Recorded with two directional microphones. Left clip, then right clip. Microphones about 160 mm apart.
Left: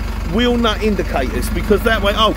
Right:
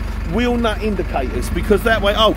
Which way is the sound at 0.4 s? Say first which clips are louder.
Left 2 dB; centre (ahead or behind).